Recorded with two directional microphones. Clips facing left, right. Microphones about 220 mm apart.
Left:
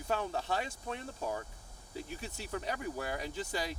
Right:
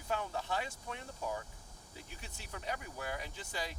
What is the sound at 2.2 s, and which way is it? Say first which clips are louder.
Speech: left 7 dB; 35° left (ahead or behind).